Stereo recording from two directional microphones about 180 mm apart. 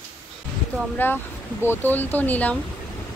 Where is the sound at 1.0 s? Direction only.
10° left (ahead or behind).